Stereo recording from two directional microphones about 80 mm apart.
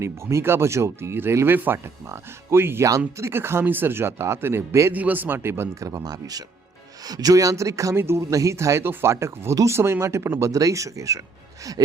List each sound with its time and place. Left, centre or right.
0.0 s a man's voice: right
4.9 s a man's voice: right
5.8 s speech: right